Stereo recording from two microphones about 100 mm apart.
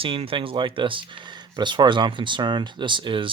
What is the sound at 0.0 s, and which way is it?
Speech, 65° right (ahead or behind).